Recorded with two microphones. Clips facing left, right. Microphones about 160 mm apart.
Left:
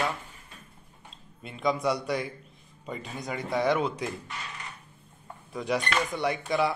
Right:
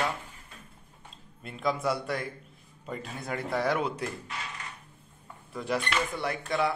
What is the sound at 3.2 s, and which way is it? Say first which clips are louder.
Speech: left 1 dB; 10° left (ahead or behind).